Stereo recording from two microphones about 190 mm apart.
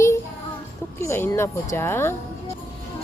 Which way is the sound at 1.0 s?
15° left (ahead or behind).